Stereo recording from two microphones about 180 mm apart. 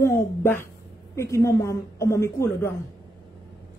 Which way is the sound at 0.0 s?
15° left (ahead or behind).